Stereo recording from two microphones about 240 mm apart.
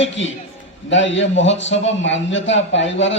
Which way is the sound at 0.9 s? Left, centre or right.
Left.